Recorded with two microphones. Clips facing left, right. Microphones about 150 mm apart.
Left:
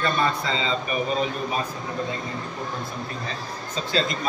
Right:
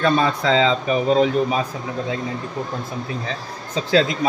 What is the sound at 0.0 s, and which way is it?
Speech, 90° right.